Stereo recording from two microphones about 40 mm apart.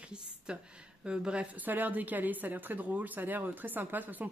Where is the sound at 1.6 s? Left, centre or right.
Right.